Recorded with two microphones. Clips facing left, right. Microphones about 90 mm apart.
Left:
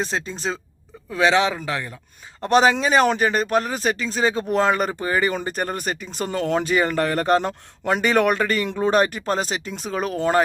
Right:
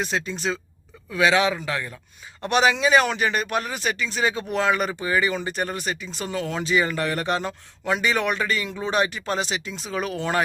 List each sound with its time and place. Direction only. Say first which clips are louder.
0.0 s speech: left 1 dB; 35° left (ahead or behind)
2.4 s speech: left 3 dB; 35° left (ahead or behind)